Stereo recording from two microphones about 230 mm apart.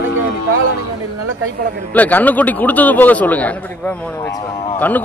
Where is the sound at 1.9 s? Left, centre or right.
Centre.